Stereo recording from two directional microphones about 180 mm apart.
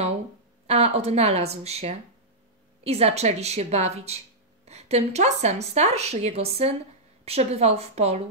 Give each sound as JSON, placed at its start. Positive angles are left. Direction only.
{"t": 0.7, "sound": "a woman's voice", "side_deg": -35}